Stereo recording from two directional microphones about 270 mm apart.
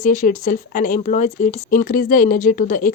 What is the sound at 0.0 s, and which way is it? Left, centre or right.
Speech, left.